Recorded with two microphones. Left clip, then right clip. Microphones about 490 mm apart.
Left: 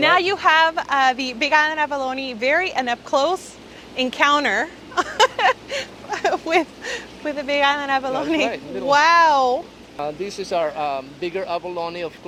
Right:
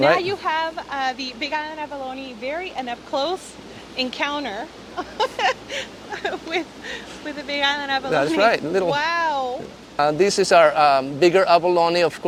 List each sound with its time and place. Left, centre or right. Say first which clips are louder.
0.0 s speech: left 2 dB; left
8.4 s speech: right 8 dB; right
8.9 s speech: left 12 dB; left
10.0 s speech: right 9 dB; right